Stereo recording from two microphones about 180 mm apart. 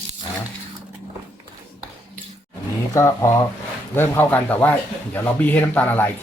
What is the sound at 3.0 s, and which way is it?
Speech, 20° left (ahead or behind).